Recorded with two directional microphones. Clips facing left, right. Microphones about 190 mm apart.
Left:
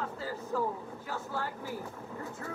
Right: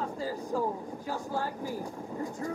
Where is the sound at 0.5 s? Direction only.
40° right (ahead or behind).